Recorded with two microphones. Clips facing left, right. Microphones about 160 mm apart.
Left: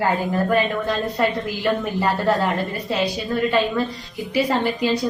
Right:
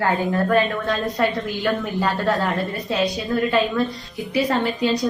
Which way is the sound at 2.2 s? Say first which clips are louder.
Left 2 dB; 20° left (ahead or behind).